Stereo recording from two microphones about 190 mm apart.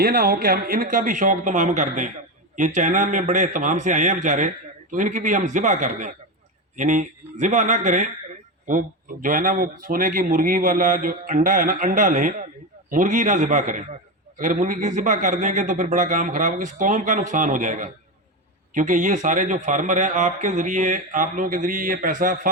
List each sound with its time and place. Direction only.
0.0 s a man's voice: 50° right (ahead or behind)